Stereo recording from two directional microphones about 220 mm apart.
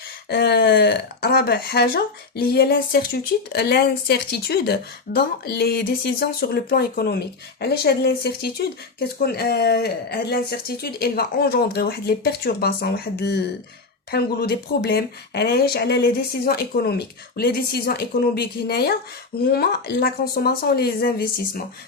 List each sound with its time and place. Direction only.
0.3 s speech: 45° left (ahead or behind)